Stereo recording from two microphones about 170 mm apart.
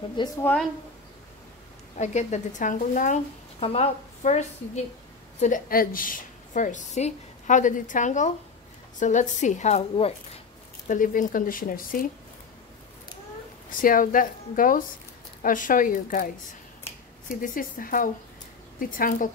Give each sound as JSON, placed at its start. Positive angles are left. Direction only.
{"t": 0.2, "sound": "a woman's voice", "side_deg": 25}
{"t": 2.0, "sound": "speech", "side_deg": 45}
{"t": 5.4, "sound": "speech", "side_deg": 55}
{"t": 10.9, "sound": "speech", "side_deg": 50}
{"t": 13.7, "sound": "speech", "side_deg": 55}
{"t": 17.3, "sound": "speech", "side_deg": 55}